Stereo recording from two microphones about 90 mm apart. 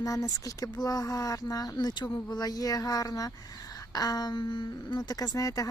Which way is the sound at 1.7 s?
55° left (ahead or behind).